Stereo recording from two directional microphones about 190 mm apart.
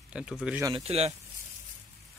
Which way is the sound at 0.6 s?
30° right (ahead or behind).